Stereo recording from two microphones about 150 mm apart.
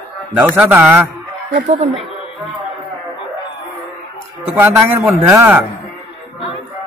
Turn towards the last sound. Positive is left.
turn(degrees=-15)  # may be behind; listen again after turning